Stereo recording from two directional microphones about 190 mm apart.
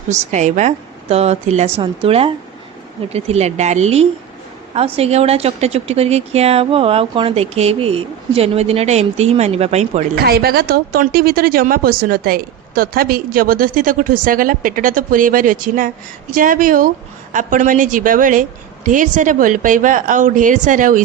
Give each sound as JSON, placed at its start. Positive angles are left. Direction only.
{"t": 0.1, "sound": "a woman's voice", "side_deg": -35}
{"t": 10.2, "sound": "a woman's voice", "side_deg": -55}